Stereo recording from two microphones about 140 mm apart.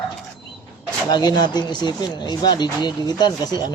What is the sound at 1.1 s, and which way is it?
Speech, 30° left (ahead or behind).